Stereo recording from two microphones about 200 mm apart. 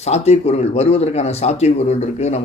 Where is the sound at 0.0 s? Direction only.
35° left (ahead or behind).